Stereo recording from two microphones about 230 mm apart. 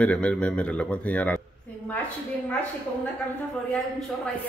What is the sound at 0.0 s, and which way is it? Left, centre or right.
A man's voice, centre.